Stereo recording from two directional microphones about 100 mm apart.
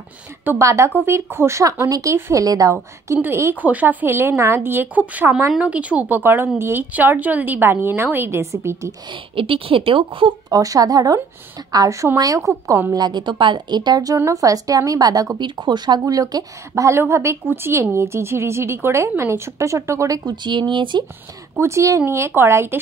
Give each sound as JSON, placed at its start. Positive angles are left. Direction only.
{"t": 0.6, "sound": "a woman's voice", "side_deg": -30}
{"t": 2.4, "sound": "a woman's voice", "side_deg": -40}
{"t": 2.7, "sound": "a woman's voice", "side_deg": -25}
{"t": 9.1, "sound": "a woman's voice", "side_deg": -60}
{"t": 10.5, "sound": "a woman's voice", "side_deg": -35}
{"t": 12.9, "sound": "a woman's voice", "side_deg": -45}
{"t": 15.3, "sound": "speech", "side_deg": -50}
{"t": 16.0, "sound": "a woman's voice", "side_deg": -35}
{"t": 20.4, "sound": "speech", "side_deg": -55}
{"t": 21.5, "sound": "a woman's voice", "side_deg": -30}